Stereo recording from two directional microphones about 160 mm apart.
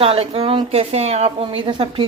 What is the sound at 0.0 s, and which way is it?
Speech, 40° right (ahead or behind).